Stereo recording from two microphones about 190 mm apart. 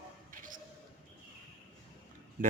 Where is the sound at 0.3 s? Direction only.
45° right (ahead or behind).